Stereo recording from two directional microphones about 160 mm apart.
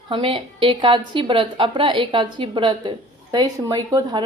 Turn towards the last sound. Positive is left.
turn(degrees=-25)  # may be behind; listen again after turning